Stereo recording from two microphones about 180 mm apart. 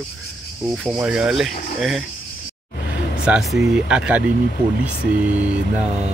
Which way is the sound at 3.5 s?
45° left (ahead or behind).